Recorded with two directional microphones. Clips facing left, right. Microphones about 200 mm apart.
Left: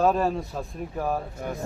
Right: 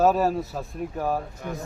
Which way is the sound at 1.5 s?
40° left (ahead or behind).